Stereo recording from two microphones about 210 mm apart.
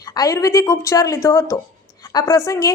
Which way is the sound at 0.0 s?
15° left (ahead or behind).